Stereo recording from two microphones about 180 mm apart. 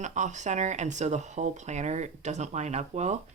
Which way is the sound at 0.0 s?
40° right (ahead or behind).